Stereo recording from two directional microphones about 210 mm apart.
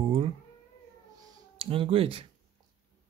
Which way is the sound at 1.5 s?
25° right (ahead or behind).